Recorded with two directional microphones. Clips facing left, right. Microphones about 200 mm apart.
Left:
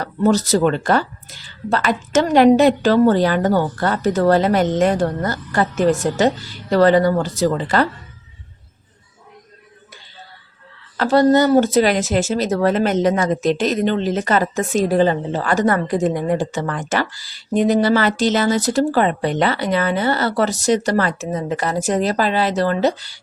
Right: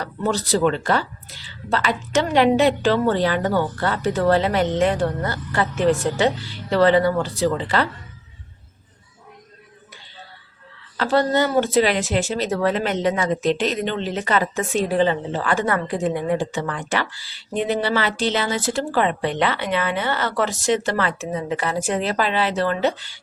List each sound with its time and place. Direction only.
0.0 s speech: 40° left (ahead or behind)
10.9 s speech: 40° left (ahead or behind)